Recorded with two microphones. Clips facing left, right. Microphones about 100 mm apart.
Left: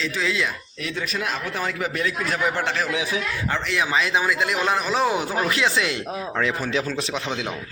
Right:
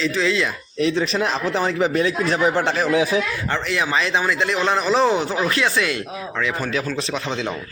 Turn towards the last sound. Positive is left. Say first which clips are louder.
# right 2 dB
turn(degrees=10)  # may be behind; listen again after turning